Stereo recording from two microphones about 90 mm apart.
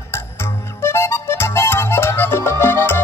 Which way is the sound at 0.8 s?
30° left (ahead or behind).